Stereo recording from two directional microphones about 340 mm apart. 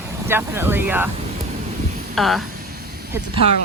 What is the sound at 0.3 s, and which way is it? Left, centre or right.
Speech, centre.